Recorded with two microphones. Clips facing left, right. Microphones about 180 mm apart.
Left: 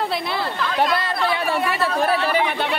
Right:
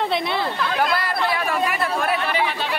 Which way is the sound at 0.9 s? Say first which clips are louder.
Left 1 dB; 25° left (ahead or behind).